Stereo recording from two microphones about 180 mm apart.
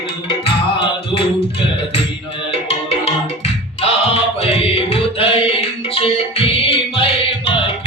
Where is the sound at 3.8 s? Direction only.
35° left (ahead or behind).